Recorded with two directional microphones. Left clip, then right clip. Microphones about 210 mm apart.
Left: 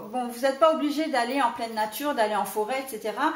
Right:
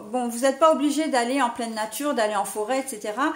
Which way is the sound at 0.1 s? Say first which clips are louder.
Right 3 dB; 50° right (ahead or behind).